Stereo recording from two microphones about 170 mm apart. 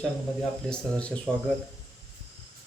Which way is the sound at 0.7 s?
5° left (ahead or behind).